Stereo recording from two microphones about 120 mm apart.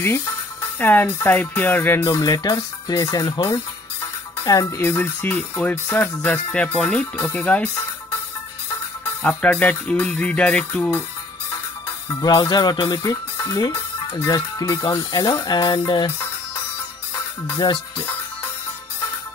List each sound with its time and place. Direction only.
0.7 s music: 15° left (ahead or behind)
2.0 s speech: 30° left (ahead or behind)
4.4 s music: 30° left (ahead or behind); by 7.8 s 10° left (ahead or behind)
9.4 s music: 10° left (ahead or behind)
12.2 s speech: 40° left (ahead or behind)
17.6 s speech: 40° left (ahead or behind)